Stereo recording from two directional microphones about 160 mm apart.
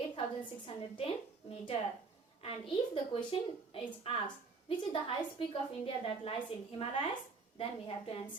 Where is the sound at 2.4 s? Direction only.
35° left (ahead or behind).